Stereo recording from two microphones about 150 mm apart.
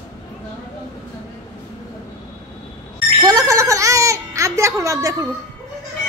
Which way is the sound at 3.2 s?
25° right (ahead or behind).